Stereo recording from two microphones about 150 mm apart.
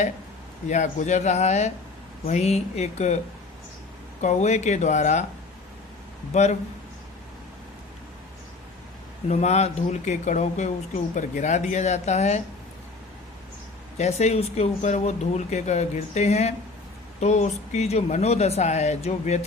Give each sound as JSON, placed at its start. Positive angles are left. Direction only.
{"t": 0.7, "sound": "speech", "side_deg": 55}
{"t": 4.2, "sound": "speech", "side_deg": 50}
{"t": 6.3, "sound": "speech", "side_deg": 50}
{"t": 9.3, "sound": "speech", "side_deg": 45}
{"t": 14.0, "sound": "speech", "side_deg": 45}